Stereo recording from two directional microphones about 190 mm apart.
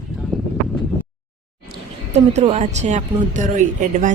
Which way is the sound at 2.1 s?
35° right (ahead or behind).